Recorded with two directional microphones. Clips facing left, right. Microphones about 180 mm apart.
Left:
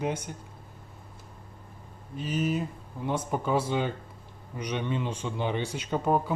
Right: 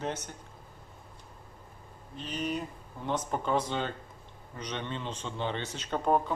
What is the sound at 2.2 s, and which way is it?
Speech, 5° left (ahead or behind).